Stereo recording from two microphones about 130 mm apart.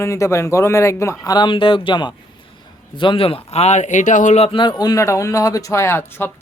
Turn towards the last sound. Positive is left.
turn(degrees=15)  # may be behind; listen again after turning